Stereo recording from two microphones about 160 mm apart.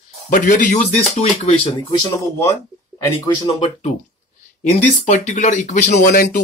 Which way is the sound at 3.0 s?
25° left (ahead or behind).